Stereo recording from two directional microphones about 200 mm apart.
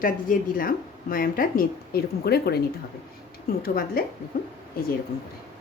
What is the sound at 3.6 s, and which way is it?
Speech, 50° left (ahead or behind).